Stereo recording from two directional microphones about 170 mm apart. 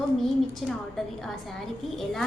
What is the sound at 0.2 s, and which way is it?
A woman's voice, centre (ahead or behind).